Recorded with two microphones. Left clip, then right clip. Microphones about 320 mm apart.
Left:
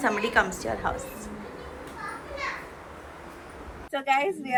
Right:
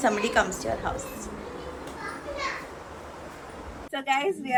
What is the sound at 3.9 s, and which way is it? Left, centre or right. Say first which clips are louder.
Speech: left 1 dB; centre.